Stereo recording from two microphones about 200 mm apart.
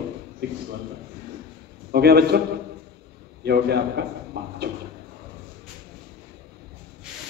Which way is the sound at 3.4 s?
55° right (ahead or behind).